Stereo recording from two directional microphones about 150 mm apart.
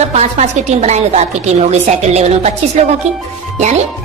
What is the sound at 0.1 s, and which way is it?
A woman's voice, 50° right (ahead or behind).